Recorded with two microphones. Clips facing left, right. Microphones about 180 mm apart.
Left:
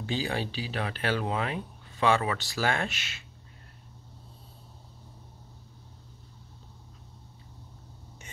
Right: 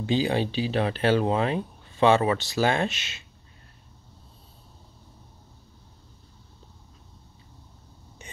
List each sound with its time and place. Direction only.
0.0 s speech: 20° right (ahead or behind)